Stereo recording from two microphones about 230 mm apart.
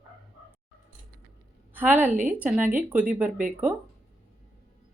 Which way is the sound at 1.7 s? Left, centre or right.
Centre.